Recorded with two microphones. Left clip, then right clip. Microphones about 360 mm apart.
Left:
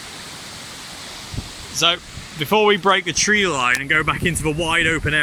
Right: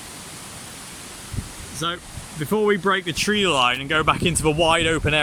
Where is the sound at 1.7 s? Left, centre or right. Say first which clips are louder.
Left 9 dB; centre.